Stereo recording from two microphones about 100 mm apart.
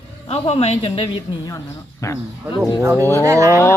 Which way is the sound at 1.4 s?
30° left (ahead or behind).